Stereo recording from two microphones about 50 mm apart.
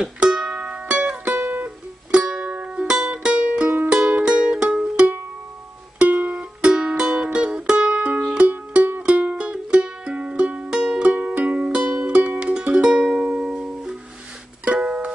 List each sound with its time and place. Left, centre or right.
0.0 s music: centre
0.8 s music: right
1.3 s music: right
2.0 s music: centre
2.5 s music: right
3.9 s music: centre
6.0 s music: right
6.3 s music: centre
7.9 s music: right
12.9 s music: centre
14.9 s music: right